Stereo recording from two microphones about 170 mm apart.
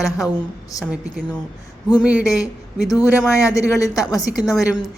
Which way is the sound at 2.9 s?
20° left (ahead or behind).